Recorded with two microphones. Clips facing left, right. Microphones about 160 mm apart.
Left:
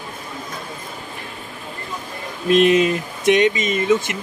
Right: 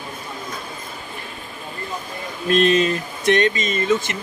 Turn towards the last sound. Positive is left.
turn(degrees=15)  # may be behind; listen again after turning